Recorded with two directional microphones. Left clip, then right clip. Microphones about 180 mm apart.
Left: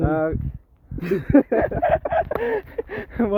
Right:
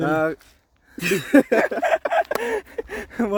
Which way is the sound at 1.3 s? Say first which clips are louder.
Right 1 dB; 90° right.